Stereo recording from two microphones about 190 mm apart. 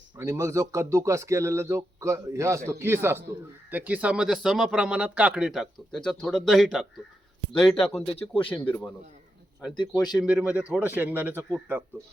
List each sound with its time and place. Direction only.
0.2 s a man's voice: 15° right (ahead or behind); by 8.9 s 10° left (ahead or behind)
10.2 s speech: 5° right (ahead or behind)